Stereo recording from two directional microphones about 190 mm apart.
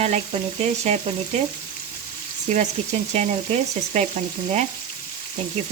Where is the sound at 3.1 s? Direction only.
35° right (ahead or behind).